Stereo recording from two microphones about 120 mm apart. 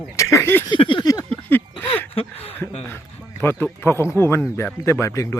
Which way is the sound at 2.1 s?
55° left (ahead or behind).